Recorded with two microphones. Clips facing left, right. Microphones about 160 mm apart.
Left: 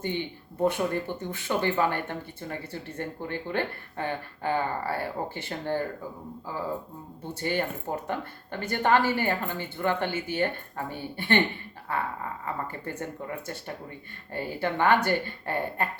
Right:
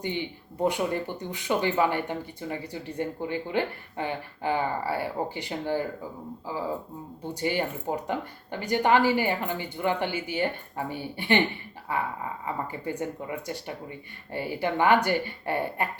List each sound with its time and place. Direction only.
0.6 s speech: 15° right (ahead or behind)
7.4 s speech: 15° right (ahead or behind)
12.8 s speech: 15° right (ahead or behind)